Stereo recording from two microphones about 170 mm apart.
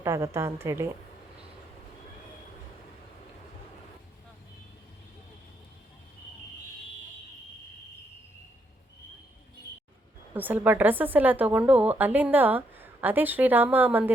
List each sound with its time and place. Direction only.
0.0 s a woman's voice: 15° right (ahead or behind)
10.3 s a woman's voice: 10° right (ahead or behind)